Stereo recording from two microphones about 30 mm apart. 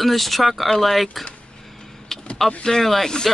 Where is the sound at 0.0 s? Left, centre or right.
Centre.